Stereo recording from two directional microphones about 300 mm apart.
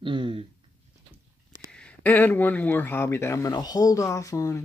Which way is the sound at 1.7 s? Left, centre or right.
Centre.